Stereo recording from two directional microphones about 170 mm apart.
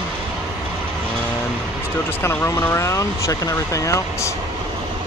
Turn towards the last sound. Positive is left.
turn(degrees=20)  # may be behind; listen again after turning